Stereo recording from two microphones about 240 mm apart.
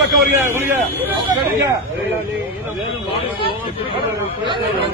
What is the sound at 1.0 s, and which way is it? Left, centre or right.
Speech, centre.